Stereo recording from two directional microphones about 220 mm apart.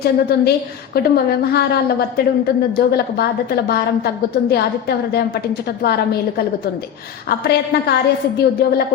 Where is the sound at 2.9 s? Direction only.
45° left (ahead or behind).